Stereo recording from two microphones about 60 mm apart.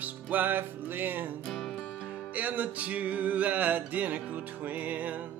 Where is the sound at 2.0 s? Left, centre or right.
Right.